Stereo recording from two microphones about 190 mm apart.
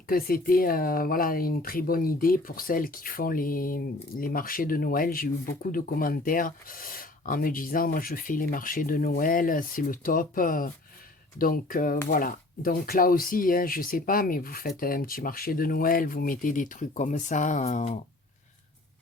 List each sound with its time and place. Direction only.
0.1 s speech: 50° left (ahead or behind)